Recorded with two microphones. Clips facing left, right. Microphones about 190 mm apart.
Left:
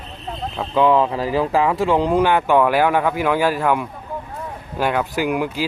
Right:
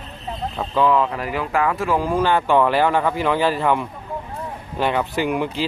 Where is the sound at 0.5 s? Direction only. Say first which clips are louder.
Left 2 dB; centre (ahead or behind).